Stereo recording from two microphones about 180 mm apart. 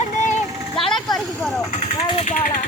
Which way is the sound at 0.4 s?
20° right (ahead or behind).